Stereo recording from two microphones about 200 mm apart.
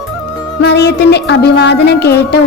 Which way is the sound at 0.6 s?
55° left (ahead or behind).